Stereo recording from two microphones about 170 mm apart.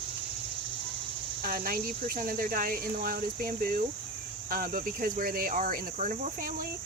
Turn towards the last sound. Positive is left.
turn(degrees=-50)  # may be behind; listen again after turning